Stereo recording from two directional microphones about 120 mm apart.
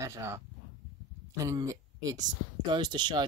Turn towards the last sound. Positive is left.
turn(degrees=-40)  # may be behind; listen again after turning